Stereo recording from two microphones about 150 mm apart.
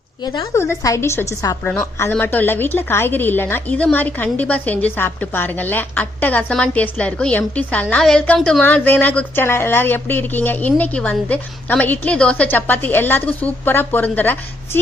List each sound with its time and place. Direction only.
0.3 s a woman's voice: 20° left (ahead or behind)